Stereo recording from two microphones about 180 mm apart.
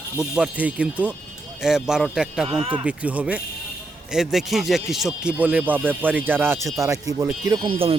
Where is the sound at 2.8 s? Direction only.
5° right (ahead or behind).